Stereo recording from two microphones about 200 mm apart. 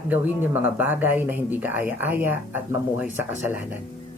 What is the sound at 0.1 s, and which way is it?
Speech, 10° right (ahead or behind).